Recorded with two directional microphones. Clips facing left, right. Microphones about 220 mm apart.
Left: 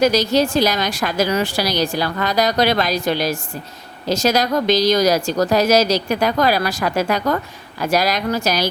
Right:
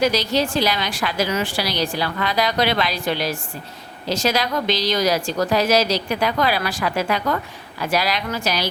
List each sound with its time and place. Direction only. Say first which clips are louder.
0.0 s a woman's voice: left 4 dB; 45° left (ahead or behind)